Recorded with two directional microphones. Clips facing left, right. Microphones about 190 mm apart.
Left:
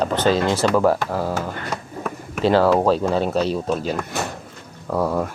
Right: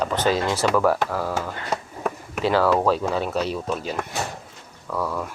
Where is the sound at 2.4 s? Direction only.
30° left (ahead or behind).